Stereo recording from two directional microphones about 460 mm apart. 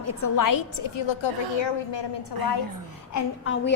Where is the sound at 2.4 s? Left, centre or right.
Right.